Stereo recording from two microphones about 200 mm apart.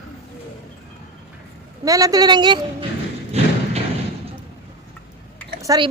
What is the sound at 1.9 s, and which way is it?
Speech, 15° right (ahead or behind).